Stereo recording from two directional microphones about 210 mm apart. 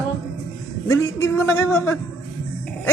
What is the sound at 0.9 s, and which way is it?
Speech, 15° left (ahead or behind).